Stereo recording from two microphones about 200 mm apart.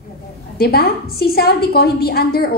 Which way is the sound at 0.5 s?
50° left (ahead or behind).